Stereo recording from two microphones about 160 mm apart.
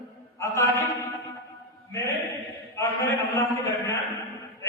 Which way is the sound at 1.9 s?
20° left (ahead or behind).